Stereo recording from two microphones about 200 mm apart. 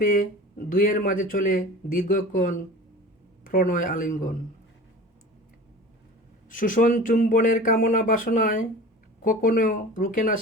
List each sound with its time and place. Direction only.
0.0 s speech: 40° left (ahead or behind)
6.5 s speech: 45° left (ahead or behind)